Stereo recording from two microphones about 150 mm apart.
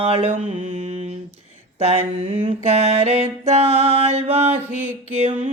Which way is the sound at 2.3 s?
45° right (ahead or behind).